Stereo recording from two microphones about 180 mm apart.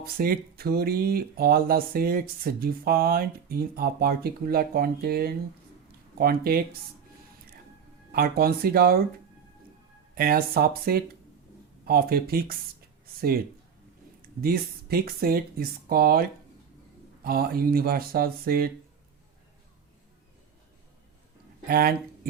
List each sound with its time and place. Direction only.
0.0 s speech: 55° right (ahead or behind)
8.1 s speech: 55° right (ahead or behind)
10.2 s speech: 55° right (ahead or behind)
14.4 s speech: 60° right (ahead or behind)
21.7 s speech: 55° right (ahead or behind)